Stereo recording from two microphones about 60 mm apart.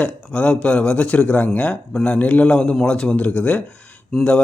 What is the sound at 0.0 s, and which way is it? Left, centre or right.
A man's voice, centre.